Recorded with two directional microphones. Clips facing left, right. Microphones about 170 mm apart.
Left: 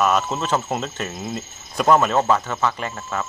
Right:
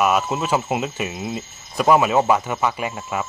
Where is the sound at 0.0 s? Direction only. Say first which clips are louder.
Right 1 dB; 10° right (ahead or behind).